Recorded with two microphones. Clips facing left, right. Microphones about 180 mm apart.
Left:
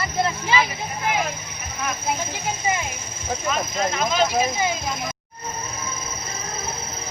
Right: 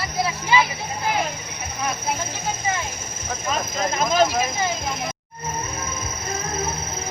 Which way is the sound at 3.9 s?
45° right (ahead or behind).